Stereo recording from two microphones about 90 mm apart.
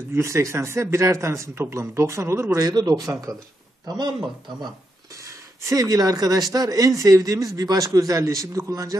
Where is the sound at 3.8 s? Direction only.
55° right (ahead or behind).